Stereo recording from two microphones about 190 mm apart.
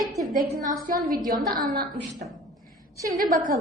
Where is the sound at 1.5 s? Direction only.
50° right (ahead or behind).